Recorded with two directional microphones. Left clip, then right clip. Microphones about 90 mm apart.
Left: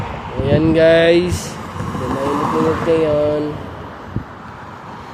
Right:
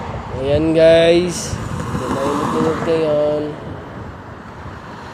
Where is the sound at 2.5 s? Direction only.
5° right (ahead or behind).